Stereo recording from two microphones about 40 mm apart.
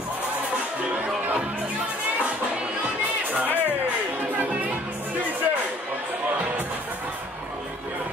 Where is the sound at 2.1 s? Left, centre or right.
Right.